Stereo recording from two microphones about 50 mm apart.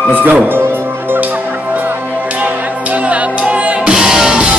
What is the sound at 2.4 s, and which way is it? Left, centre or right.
Music, right.